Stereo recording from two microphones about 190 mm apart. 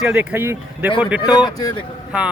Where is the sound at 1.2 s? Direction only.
20° left (ahead or behind).